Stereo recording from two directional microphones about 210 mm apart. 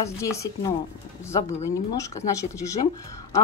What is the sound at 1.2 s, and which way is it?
Speech, 15° left (ahead or behind).